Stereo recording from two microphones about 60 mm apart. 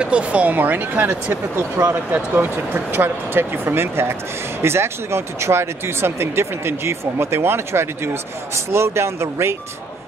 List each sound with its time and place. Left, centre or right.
0.0 s speech: centre; by 9.6 s right